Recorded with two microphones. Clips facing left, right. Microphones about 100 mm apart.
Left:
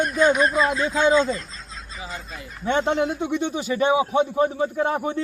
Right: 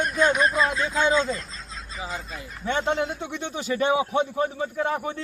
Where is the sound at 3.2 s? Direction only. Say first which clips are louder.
Left 7 dB; 10° left (ahead or behind).